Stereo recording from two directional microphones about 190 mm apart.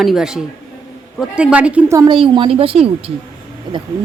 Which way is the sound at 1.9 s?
25° right (ahead or behind).